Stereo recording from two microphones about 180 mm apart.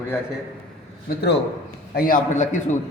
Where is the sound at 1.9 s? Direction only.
50° left (ahead or behind).